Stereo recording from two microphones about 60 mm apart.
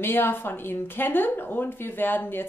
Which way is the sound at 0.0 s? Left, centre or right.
Left.